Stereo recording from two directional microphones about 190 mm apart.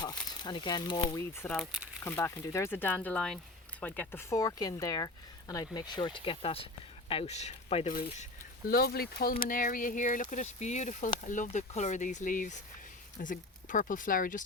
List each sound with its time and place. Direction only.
0.4 s speech: 25° left (ahead or behind)
1.5 s speech: 5° right (ahead or behind)
2.0 s speech: 15° left (ahead or behind); by 8.0 s 30° left (ahead or behind)
8.2 s speech: 50° left (ahead or behind)